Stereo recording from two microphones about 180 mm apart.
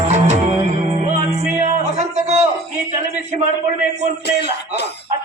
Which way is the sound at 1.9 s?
40° right (ahead or behind).